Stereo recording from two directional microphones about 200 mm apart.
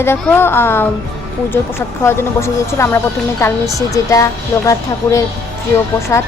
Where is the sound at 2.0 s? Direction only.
15° left (ahead or behind).